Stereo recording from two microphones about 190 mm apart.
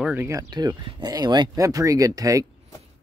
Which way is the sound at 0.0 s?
10° right (ahead or behind).